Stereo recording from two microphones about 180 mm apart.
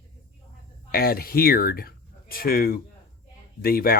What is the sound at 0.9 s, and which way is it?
Speech, 55° left (ahead or behind).